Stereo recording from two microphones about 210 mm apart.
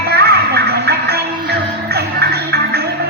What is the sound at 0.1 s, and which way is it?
Music, 50° right (ahead or behind).